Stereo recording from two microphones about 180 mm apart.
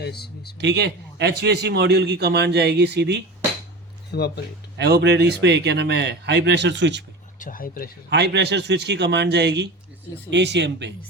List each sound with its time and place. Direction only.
0.0 s speech: 60° left (ahead or behind)
0.6 s a man's voice: 70° right (ahead or behind)
4.1 s speech: 65° left (ahead or behind)
4.8 s a man's voice: 70° right (ahead or behind)
7.3 s speech: 50° left (ahead or behind)
8.1 s a man's voice: 70° right (ahead or behind)